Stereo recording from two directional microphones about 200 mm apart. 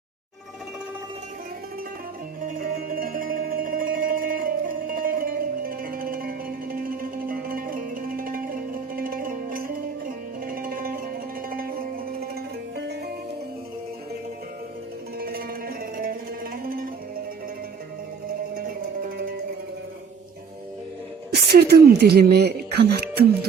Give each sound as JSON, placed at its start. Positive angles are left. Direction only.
{"t": 2.4, "sound": "music", "side_deg": -45}
{"t": 15.2, "sound": "music", "side_deg": -50}
{"t": 19.0, "sound": "music", "side_deg": -45}
{"t": 21.3, "sound": "speech", "side_deg": -55}